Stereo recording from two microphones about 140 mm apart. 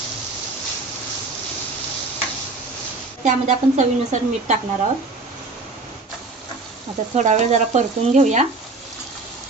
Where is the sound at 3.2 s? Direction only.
55° right (ahead or behind).